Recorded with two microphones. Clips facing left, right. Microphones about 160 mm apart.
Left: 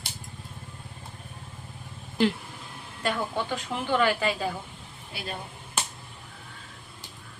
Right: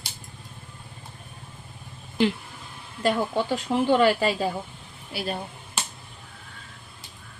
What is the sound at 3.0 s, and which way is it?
Speech, 30° right (ahead or behind).